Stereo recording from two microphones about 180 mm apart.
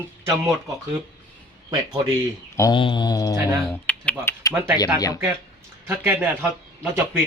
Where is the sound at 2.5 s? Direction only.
15° left (ahead or behind).